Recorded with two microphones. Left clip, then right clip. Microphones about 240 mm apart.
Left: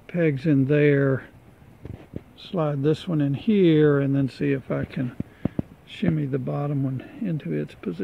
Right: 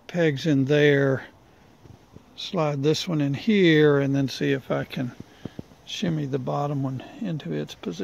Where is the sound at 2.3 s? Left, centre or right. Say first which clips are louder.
Right 1 dB; right.